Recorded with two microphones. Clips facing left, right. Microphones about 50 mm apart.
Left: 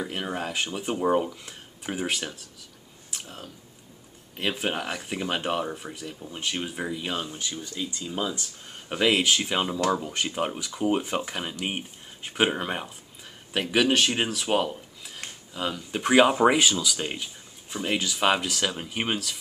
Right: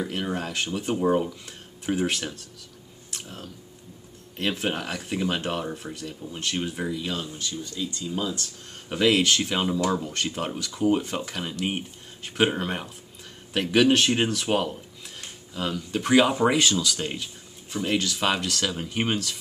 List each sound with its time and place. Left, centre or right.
0.0 s speech: centre
6.9 s speech: left; by 19.3 s centre